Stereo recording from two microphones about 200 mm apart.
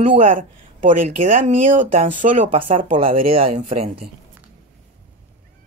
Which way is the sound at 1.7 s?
40° right (ahead or behind).